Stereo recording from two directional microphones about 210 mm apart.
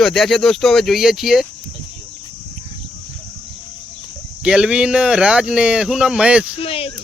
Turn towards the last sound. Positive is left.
turn(degrees=25)  # may be behind; listen again after turning